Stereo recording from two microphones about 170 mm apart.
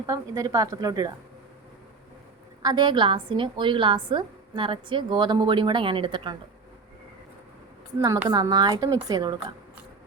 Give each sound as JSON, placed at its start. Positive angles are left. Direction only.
{"t": 0.0, "sound": "a woman's voice", "side_deg": -20}
{"t": 2.6, "sound": "a woman's voice", "side_deg": -25}
{"t": 7.9, "sound": "a woman's voice", "side_deg": -15}